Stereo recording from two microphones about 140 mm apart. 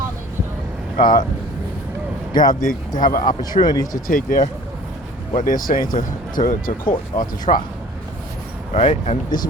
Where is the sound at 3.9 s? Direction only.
75° left (ahead or behind).